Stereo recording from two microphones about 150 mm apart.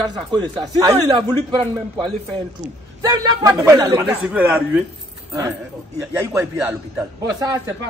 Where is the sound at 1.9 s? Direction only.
35° right (ahead or behind).